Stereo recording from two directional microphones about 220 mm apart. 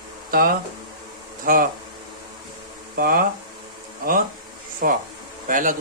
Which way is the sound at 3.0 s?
40° right (ahead or behind).